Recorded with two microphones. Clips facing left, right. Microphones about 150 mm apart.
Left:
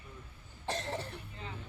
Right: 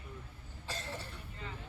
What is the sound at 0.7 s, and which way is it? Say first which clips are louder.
Cough: left 6 dB; 60° left (ahead or behind).